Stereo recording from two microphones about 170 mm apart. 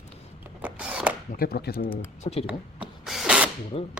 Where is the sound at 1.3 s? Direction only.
65° left (ahead or behind).